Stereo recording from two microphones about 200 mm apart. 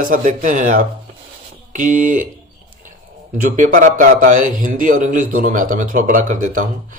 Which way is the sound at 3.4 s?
40° right (ahead or behind).